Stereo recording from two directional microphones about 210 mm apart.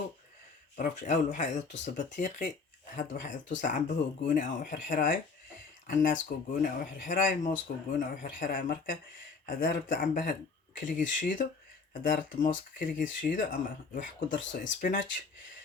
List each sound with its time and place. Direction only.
0.8 s speech: 35° left (ahead or behind)